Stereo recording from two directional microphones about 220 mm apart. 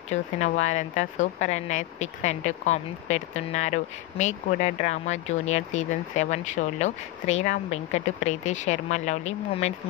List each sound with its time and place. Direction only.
0.1 s speech: 30° left (ahead or behind)